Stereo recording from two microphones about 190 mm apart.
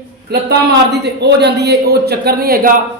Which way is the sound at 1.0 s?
60° right (ahead or behind).